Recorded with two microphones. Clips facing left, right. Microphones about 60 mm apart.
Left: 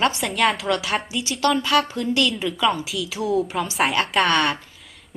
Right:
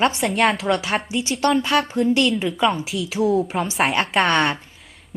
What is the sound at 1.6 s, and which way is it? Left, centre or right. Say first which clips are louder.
Speech: right 1 dB; right.